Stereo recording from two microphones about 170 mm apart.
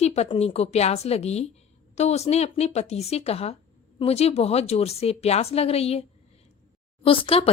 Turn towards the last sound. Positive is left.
turn(degrees=35)  # may be behind; listen again after turning